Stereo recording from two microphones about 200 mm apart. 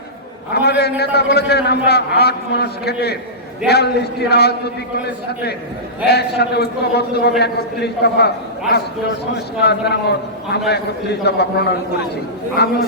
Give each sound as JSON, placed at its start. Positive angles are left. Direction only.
{"t": 0.5, "sound": "a man's voice", "side_deg": 55}
{"t": 9.6, "sound": "a man's voice", "side_deg": 55}